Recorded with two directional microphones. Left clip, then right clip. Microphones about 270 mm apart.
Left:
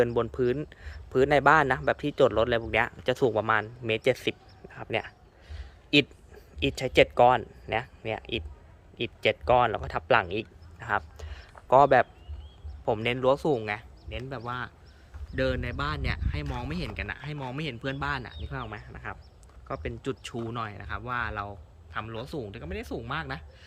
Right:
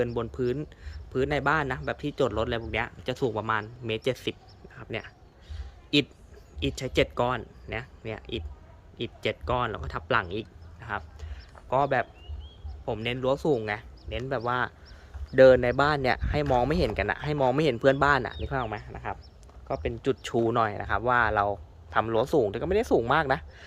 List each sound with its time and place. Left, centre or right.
0.0 s speech: centre